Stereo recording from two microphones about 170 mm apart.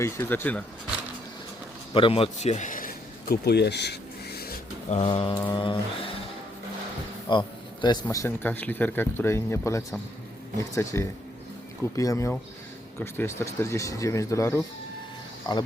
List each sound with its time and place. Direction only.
0.0 s speech: 15° left (ahead or behind)
1.9 s a sound: 30° left (ahead or behind); by 4.5 s 70° left (ahead or behind)
4.9 s mantra: 30° left (ahead or behind)
7.3 s a man's voice: 30° left (ahead or behind)
8.0 s speech: 15° left (ahead or behind)
15.5 s mantra: 25° left (ahead or behind)